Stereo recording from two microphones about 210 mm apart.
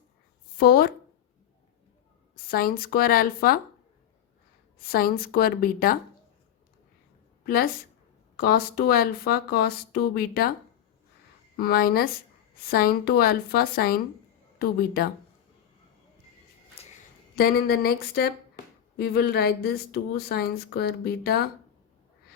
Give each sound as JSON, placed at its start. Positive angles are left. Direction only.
{"t": 0.5, "sound": "speech", "side_deg": 45}
{"t": 2.3, "sound": "speech", "side_deg": 45}
{"t": 4.8, "sound": "speech", "side_deg": 45}
{"t": 7.4, "sound": "a woman's voice", "side_deg": 45}
{"t": 11.5, "sound": "speech", "side_deg": 45}
{"t": 16.8, "sound": "a sound", "side_deg": 30}
{"t": 17.3, "sound": "speech", "side_deg": 45}